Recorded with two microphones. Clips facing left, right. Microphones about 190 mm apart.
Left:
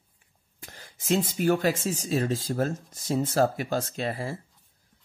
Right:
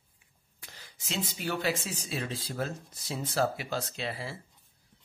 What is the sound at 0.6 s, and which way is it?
Speech, 50° left (ahead or behind).